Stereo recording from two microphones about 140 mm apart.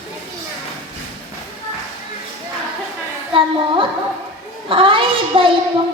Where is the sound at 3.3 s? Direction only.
40° right (ahead or behind).